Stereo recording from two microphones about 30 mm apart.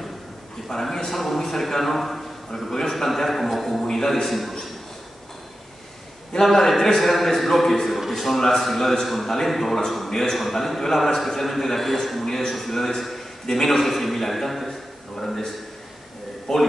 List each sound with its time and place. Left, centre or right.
0.7 s a man's voice: centre
3.8 s a man's voice: centre
4.3 s a man's voice: centre
6.4 s a man's voice: centre
8.4 s a man's voice: centre